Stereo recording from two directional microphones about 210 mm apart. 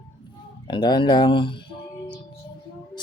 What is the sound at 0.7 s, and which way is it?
Speech, 20° left (ahead or behind).